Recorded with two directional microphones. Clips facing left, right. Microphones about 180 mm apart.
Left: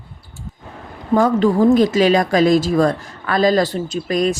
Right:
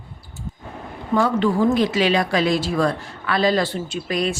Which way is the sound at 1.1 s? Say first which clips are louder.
Left 4 dB; 40° left (ahead or behind).